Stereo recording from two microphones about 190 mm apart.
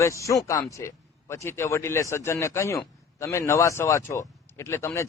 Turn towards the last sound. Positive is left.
turn(degrees=15)  # may be behind; listen again after turning